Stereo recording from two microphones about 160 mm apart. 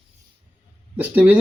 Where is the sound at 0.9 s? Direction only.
10° right (ahead or behind).